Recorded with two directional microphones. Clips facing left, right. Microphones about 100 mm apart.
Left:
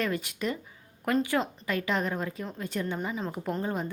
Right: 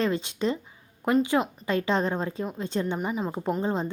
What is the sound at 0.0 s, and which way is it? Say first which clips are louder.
A woman's voice: right 4 dB; 25° right (ahead or behind).